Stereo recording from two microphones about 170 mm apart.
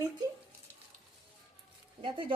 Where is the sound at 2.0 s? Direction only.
30° right (ahead or behind).